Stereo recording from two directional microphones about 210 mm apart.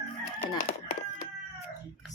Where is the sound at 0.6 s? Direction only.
35° left (ahead or behind).